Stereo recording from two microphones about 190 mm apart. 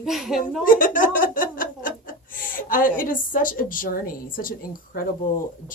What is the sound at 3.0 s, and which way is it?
A woman's voice, 45° left (ahead or behind).